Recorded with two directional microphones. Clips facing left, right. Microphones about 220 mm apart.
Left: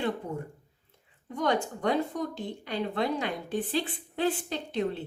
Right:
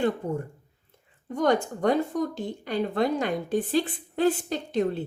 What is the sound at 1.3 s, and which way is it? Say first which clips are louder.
A woman's voice: right 5 dB; 45° right (ahead or behind).